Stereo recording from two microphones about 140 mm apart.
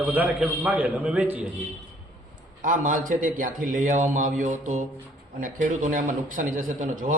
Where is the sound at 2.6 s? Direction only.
80° right.